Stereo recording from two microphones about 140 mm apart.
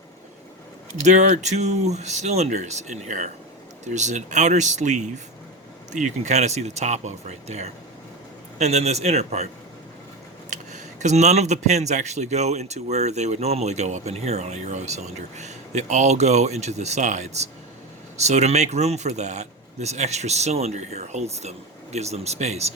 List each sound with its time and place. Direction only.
1.0 s speech: 55° right (ahead or behind)
10.5 s speech: 55° right (ahead or behind)